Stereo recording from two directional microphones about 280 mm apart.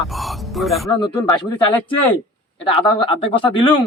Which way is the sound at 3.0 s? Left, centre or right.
Centre.